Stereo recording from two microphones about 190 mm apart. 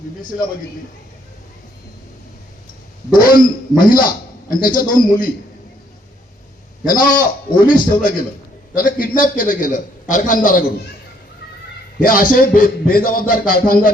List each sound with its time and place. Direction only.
3.2 s a man's voice: 50° left (ahead or behind)
6.8 s a man's voice: 45° left (ahead or behind)
11.9 s a man's voice: 45° left (ahead or behind)